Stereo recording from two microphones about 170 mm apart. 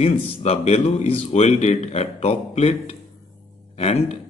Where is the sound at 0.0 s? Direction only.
40° left (ahead or behind).